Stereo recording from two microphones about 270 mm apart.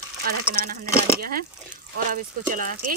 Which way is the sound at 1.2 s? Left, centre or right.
Right.